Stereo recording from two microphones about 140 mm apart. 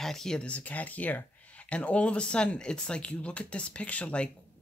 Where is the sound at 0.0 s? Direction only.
5° left (ahead or behind).